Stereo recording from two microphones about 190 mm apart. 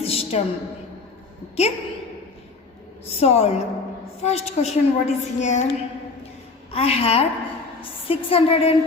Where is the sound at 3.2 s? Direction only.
35° left (ahead or behind).